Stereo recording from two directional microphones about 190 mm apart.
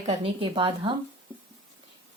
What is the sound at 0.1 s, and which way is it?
Speech, 25° right (ahead or behind).